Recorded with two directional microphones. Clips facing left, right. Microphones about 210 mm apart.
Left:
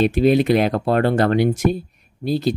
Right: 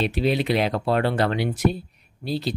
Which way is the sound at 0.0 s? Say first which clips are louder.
Left 7 dB; 50° left (ahead or behind).